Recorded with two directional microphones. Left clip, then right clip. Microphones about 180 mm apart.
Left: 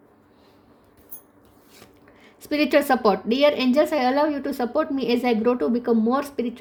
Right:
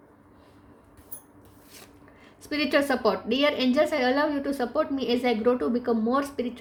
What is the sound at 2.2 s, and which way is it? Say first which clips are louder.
A woman's voice: left 5 dB; 45° left (ahead or behind).